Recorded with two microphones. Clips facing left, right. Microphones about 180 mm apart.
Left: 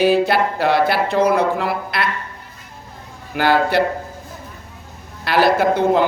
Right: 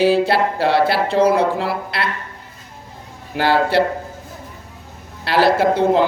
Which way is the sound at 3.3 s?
30° right (ahead or behind).